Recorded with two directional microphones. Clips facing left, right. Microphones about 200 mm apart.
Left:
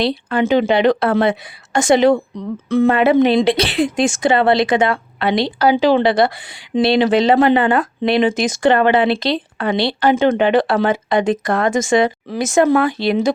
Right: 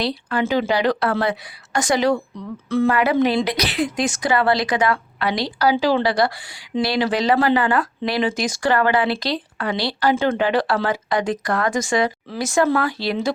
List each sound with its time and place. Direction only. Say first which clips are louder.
0.0 s a woman's voice: left 5 dB; 25° left (ahead or behind)